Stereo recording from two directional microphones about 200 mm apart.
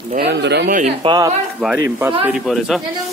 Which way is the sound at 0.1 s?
55° right (ahead or behind).